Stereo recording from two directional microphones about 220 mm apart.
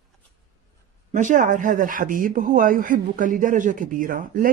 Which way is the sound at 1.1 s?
35° right (ahead or behind).